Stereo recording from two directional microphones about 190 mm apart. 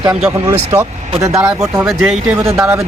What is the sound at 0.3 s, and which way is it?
Speech, 10° right (ahead or behind).